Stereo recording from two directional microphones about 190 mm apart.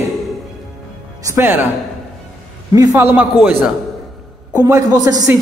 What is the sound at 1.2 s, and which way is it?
Speech, 15° right (ahead or behind).